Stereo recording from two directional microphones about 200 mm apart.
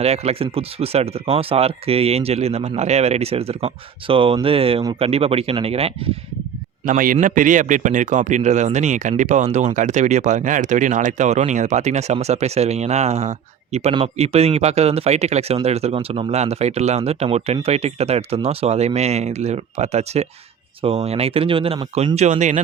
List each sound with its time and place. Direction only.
0.0 s a man's voice: 30° right (ahead or behind)
6.8 s a man's voice: 40° right (ahead or behind)